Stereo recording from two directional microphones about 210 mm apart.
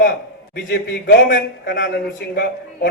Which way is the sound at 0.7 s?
50° left (ahead or behind).